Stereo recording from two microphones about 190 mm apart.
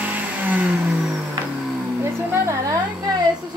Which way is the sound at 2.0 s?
15° right (ahead or behind).